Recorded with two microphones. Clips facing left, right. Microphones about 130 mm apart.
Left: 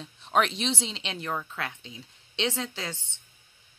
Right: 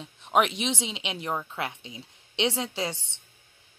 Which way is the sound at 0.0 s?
15° right (ahead or behind).